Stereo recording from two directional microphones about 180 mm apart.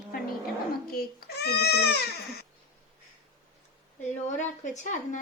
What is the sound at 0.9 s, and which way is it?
Cat, 55° left (ahead or behind).